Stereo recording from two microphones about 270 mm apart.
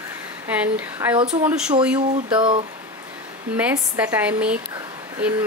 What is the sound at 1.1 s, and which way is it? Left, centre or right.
Speech, right.